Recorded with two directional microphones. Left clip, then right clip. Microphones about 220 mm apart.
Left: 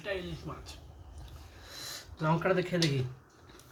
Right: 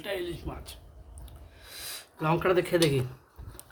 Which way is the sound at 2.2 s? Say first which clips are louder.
Right 4 dB; 40° right (ahead or behind).